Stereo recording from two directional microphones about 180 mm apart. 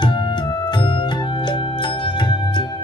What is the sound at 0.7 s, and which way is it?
Music, 25° left (ahead or behind).